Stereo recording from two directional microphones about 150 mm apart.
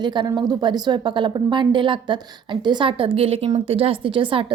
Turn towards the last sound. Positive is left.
turn(degrees=-35)  # may be behind; listen again after turning